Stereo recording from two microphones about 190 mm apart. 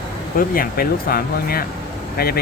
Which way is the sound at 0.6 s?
50° left (ahead or behind).